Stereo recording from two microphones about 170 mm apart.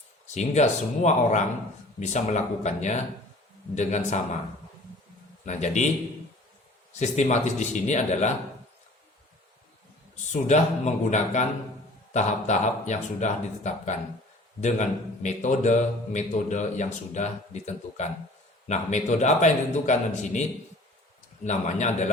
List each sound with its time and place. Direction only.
0.3 s a man's voice: 45° left (ahead or behind)
5.5 s a man's voice: 45° left (ahead or behind)
7.0 s a man's voice: 45° left (ahead or behind)
10.3 s a man's voice: 45° left (ahead or behind)
21.4 s a man's voice: 45° left (ahead or behind)